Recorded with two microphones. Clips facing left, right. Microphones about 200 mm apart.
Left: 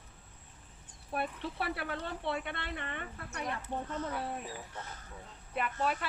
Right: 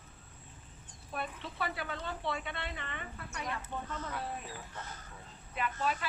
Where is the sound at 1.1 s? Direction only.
60° left (ahead or behind).